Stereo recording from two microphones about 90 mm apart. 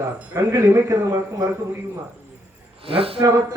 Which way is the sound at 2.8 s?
90° right.